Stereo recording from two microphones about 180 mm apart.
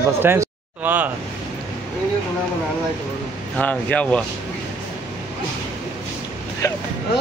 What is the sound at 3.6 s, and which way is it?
Speech, 10° left (ahead or behind).